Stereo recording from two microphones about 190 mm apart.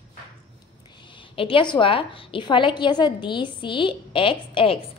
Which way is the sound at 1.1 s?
25° left (ahead or behind).